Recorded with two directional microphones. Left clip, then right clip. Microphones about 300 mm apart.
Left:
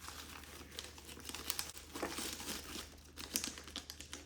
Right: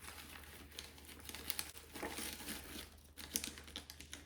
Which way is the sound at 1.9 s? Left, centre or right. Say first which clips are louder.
Left 3 dB; centre.